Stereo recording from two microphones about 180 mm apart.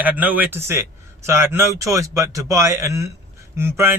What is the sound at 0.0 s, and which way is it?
Speech, 10° right (ahead or behind).